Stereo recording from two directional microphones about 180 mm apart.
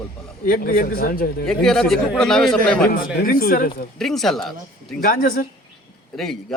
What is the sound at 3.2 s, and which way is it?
Speech, 50° left (ahead or behind).